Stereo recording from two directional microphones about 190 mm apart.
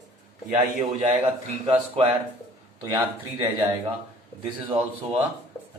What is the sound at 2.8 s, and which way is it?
Speech, 15° right (ahead or behind).